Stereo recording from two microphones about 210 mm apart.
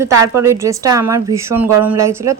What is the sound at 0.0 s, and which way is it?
A woman's voice, 15° right (ahead or behind).